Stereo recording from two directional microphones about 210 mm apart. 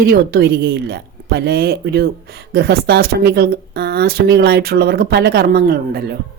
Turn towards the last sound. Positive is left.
turn(degrees=-50)  # may be behind; listen again after turning